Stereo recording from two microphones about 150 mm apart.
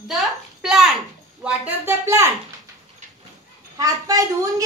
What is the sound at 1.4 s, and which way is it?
Speech, 15° right (ahead or behind).